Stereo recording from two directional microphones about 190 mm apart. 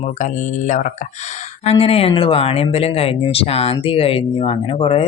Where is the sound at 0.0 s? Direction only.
40° left (ahead or behind).